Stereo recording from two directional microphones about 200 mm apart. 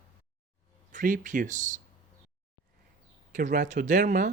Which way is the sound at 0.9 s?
40° right (ahead or behind).